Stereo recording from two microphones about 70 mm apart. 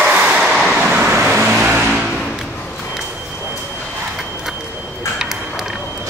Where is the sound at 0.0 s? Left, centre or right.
Centre.